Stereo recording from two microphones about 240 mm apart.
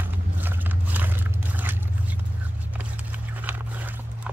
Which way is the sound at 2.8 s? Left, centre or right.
Centre.